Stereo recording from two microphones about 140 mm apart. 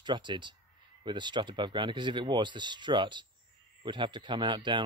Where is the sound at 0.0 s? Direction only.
35° right (ahead or behind).